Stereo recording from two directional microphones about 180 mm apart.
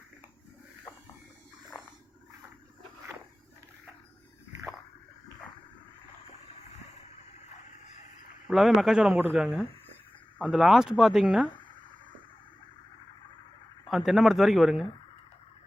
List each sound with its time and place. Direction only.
8.4 s a man's voice: centre (ahead or behind)
13.9 s a man's voice: centre (ahead or behind)